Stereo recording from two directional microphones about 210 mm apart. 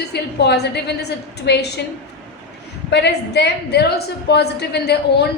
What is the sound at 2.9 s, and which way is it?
A woman's voice, 50° left (ahead or behind).